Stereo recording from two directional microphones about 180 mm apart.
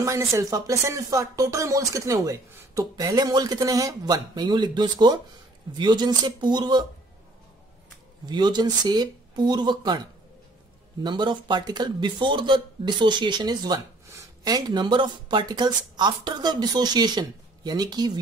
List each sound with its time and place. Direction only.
0.0 s a man's voice: 15° right (ahead or behind)
8.3 s a man's voice: 25° right (ahead or behind)